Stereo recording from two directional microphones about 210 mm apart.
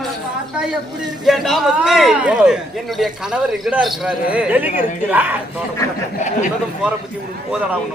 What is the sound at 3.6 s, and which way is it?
A man's voice, centre (ahead or behind).